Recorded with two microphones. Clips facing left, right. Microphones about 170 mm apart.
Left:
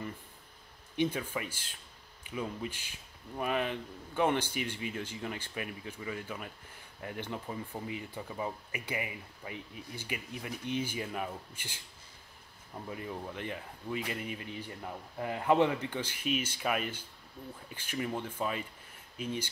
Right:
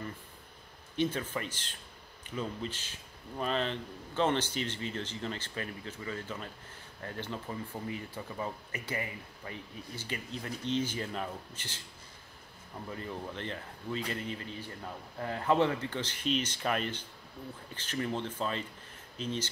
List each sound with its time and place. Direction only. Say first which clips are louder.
0.9 s speech: even; 15° left (ahead or behind)
12.9 s speech: even; 10° left (ahead or behind)